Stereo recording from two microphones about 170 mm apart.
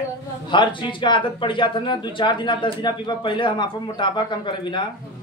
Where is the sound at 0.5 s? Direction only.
30° left (ahead or behind).